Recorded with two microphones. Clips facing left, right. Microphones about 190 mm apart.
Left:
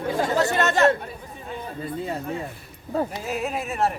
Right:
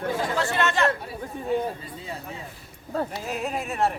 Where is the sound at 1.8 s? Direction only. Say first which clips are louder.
Left 8 dB; 55° left (ahead or behind).